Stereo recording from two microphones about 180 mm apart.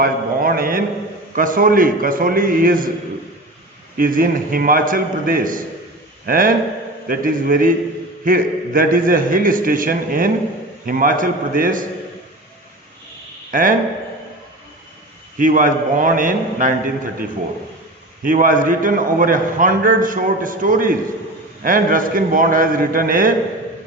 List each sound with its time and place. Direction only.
0.0 s a sound: 55° right (ahead or behind)
1.4 s a man's voice: 50° right (ahead or behind)
3.9 s a man's voice: 50° right (ahead or behind)
13.5 s speech: 50° right (ahead or behind)
15.4 s a man's voice: 50° right (ahead or behind)